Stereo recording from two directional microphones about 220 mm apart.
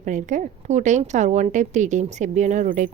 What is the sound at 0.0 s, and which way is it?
A woman's voice, 35° right (ahead or behind).